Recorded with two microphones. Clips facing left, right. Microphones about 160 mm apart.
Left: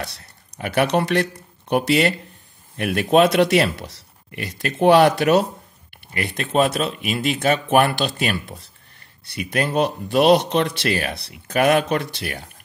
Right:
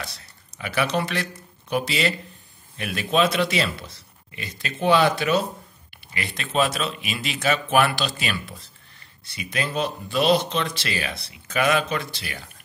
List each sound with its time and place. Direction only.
0.0 s a sound: 60° left (ahead or behind)
2.8 s speech: 60° left (ahead or behind)
6.1 s speech: 55° left (ahead or behind)